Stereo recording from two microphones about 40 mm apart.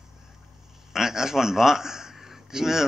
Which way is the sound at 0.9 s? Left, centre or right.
Centre.